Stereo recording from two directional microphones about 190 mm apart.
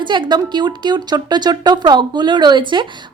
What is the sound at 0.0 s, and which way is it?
Speech, 25° right (ahead or behind).